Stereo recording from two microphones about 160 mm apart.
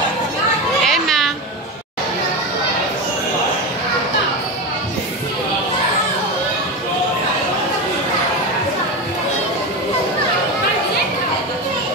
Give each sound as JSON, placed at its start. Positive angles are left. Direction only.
{"t": 0.8, "sound": "children playing", "side_deg": 0}